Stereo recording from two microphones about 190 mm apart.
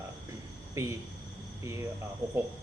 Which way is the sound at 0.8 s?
15° right (ahead or behind).